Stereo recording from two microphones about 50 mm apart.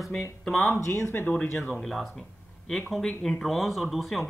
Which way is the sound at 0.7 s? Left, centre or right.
Left.